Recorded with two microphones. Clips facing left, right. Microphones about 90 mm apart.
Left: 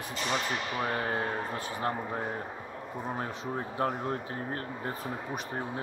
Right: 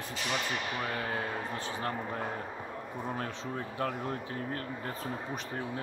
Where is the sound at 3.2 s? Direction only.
25° left (ahead or behind).